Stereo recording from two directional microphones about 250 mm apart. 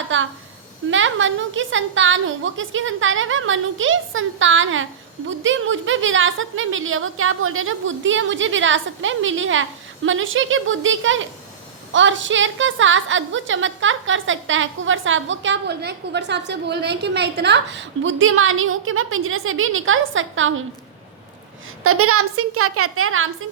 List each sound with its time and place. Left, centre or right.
0.1 s a woman's voice: right
21.8 s a woman's voice: right